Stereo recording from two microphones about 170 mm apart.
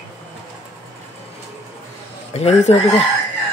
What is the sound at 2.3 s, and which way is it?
Speech, 40° left (ahead or behind).